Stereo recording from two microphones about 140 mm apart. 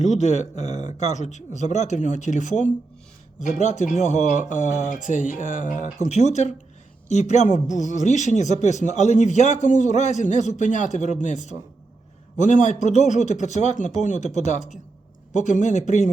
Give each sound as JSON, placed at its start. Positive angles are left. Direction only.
{"t": 0.0, "sound": "a man's voice", "side_deg": 55}
{"t": 6.1, "sound": "a man's voice", "side_deg": 55}